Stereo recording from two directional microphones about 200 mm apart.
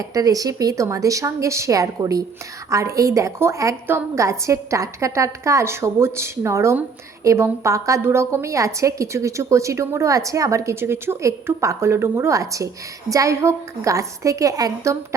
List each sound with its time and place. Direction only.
0.0 s a woman's voice: 15° right (ahead or behind)